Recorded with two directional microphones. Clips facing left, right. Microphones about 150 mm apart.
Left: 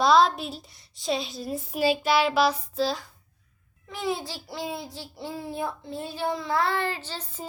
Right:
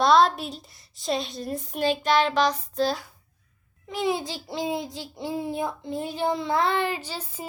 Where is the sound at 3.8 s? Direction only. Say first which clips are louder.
Right 4 dB; 20° right (ahead or behind).